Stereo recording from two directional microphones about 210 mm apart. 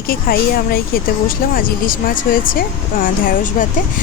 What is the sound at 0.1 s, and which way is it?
Speech, 45° left (ahead or behind).